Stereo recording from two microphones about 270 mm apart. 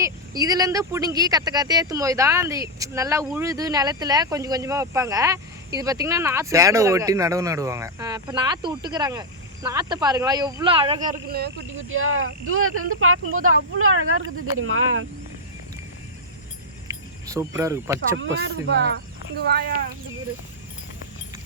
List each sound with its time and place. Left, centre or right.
0.0 s speech: centre
11.3 s speech: right
16.9 s keys jangling: centre
17.2 s speech: centre
18.5 s speech: right